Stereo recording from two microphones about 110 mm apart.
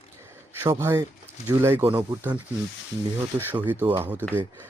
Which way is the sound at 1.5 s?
25° right (ahead or behind).